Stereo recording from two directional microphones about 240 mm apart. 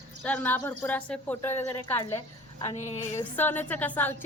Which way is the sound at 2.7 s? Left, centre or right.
Left.